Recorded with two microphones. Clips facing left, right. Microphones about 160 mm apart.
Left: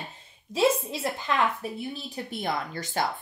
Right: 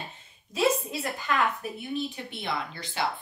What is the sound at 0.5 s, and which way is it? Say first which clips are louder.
Speech: left 2 dB; 25° left (ahead or behind).